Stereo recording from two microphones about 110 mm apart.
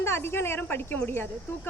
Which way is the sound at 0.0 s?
20° left (ahead or behind).